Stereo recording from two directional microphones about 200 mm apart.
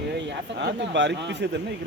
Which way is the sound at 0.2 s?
60° right (ahead or behind).